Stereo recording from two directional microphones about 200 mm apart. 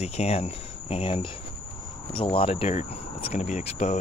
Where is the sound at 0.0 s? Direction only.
30° left (ahead or behind).